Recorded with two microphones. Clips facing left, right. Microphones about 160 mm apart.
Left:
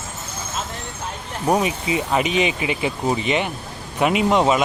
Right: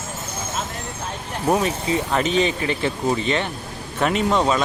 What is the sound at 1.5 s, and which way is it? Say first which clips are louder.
Speech: left 1 dB; 15° left (ahead or behind).